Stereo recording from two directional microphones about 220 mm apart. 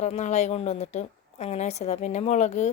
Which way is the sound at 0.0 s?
30° left (ahead or behind).